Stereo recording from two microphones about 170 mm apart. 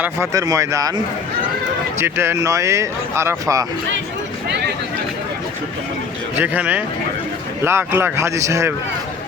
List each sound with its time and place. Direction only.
0.0 s speech: 20° right (ahead or behind)
2.0 s speech: 15° right (ahead or behind)
6.4 s speech: 10° right (ahead or behind)